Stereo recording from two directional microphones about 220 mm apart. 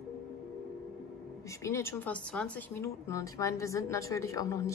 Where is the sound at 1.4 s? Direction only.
15° left (ahead or behind).